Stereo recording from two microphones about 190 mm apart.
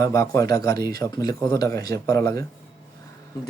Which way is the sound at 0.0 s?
15° left (ahead or behind).